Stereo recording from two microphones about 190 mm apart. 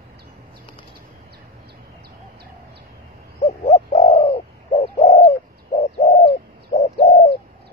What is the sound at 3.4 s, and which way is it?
Bird, 30° left (ahead or behind).